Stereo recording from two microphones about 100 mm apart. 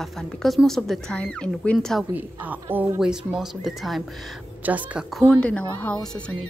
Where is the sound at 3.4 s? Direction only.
Centre (ahead or behind).